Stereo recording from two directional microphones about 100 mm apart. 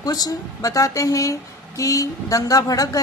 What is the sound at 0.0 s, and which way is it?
A woman's voice, 40° left (ahead or behind).